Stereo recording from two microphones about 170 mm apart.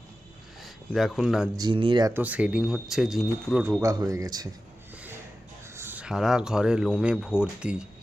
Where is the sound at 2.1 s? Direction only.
10° right (ahead or behind).